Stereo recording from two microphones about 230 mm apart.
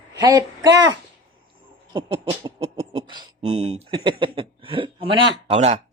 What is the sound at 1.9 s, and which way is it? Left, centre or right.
Speech, centre.